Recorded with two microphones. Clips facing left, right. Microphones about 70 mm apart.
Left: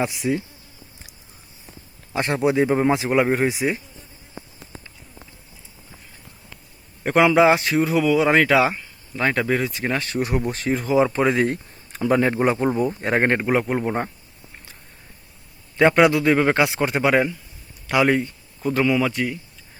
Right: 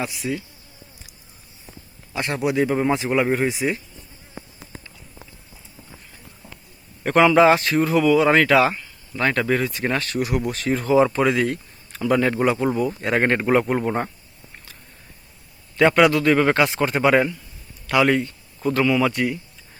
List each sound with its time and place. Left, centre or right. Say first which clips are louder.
0.0 s speech: left 4 dB; left
2.1 s speech: left 2 dB; left
3.5 s speech: even; centre
7.0 s speech: right 1 dB; centre
10.0 s speech: even; left
10.7 s speech: right 2 dB; centre
13.4 s speech: right 2 dB; centre
15.8 s speech: even; centre